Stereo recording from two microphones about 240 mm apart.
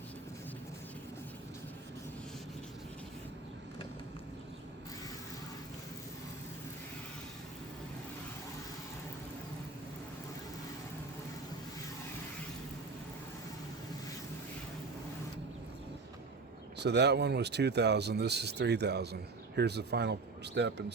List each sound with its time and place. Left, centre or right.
16.7 s speech: right